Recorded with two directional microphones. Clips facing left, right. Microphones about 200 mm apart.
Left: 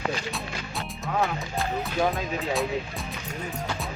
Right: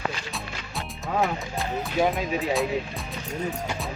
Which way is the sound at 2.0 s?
15° right (ahead or behind).